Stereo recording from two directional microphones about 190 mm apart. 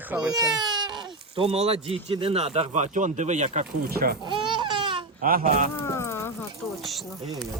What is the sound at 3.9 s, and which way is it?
Speech, 55° right (ahead or behind).